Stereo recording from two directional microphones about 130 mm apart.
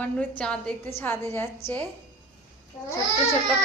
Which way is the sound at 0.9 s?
20° left (ahead or behind).